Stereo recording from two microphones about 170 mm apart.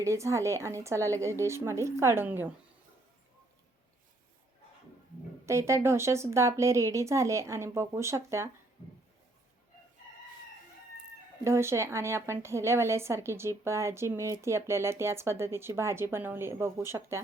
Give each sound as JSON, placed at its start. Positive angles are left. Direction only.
{"t": 0.0, "sound": "speech", "side_deg": -15}
{"t": 5.5, "sound": "speech", "side_deg": -15}
{"t": 11.4, "sound": "speech", "side_deg": -15}